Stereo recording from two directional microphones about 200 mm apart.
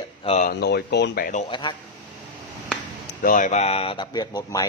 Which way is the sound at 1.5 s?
25° left (ahead or behind).